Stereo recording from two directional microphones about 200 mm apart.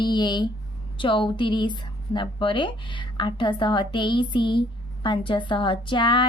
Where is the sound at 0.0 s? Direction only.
20° left (ahead or behind).